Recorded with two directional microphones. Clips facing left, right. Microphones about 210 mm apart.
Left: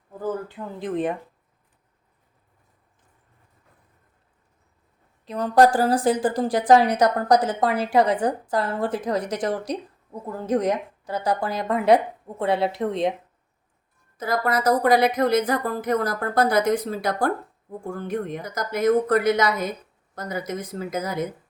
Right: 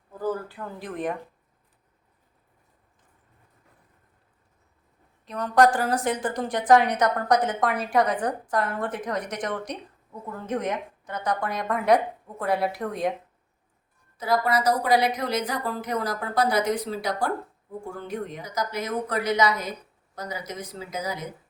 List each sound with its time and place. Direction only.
0.1 s speech: 20° left (ahead or behind)
5.2 s a woman's voice: 30° left (ahead or behind)
14.2 s speech: 50° left (ahead or behind)